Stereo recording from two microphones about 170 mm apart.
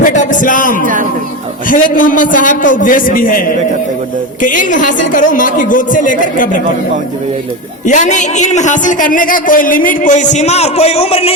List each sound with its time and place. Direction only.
0.0 s a man's voice: 50° left (ahead or behind)
7.9 s a man's voice: 45° left (ahead or behind)